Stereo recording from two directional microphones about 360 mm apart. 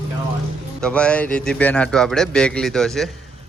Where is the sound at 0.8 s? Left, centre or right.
Centre.